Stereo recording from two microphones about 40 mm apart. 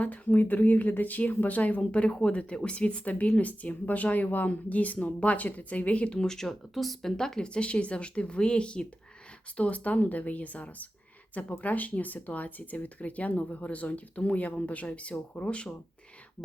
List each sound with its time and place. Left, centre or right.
0.0 s speech: left
1.8 s speech: left
6.1 s speech: centre
7.2 s speech: centre
9.6 s speech: left